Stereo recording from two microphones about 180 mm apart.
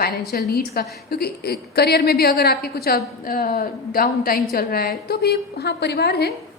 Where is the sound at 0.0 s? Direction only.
60° left (ahead or behind).